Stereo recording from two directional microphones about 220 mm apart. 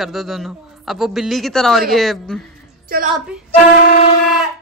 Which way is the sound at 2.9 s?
40° right (ahead or behind).